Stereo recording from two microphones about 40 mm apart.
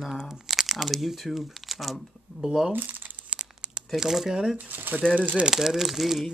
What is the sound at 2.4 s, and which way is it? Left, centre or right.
Speech, centre.